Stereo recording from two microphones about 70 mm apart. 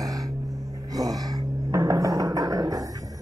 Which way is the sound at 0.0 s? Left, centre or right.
Right.